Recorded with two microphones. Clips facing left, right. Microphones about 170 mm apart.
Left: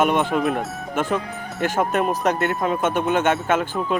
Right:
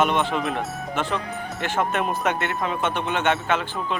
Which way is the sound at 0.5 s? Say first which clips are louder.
Left 2 dB; 45° left (ahead or behind).